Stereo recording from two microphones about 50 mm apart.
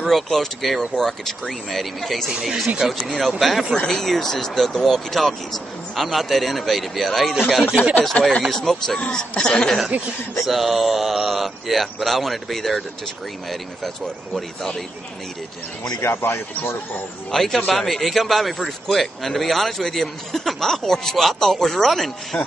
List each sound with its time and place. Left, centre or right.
0.0 s a man's voice: centre
3.7 s a man's voice: centre
8.0 s a man's voice: centre
9.3 s speech: centre
10.4 s a man's voice: centre
16.0 s speech: left
17.3 s a man's voice: centre